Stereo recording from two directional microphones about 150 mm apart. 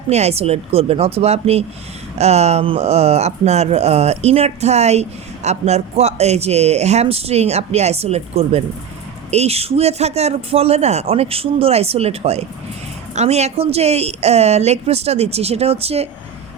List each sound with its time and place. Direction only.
0.1 s speech: 45° right (ahead or behind)